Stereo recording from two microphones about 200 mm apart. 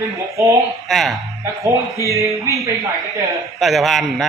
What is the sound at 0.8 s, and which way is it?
Speech, centre (ahead or behind).